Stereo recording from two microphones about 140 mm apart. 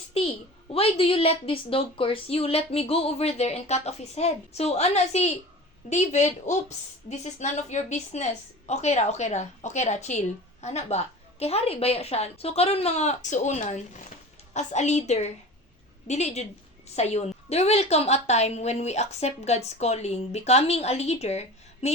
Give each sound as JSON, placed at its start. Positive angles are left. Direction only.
{"t": 0.7, "sound": "a woman's voice", "side_deg": 45}